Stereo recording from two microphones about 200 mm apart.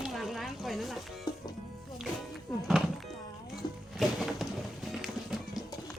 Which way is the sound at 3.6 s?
20° left (ahead or behind).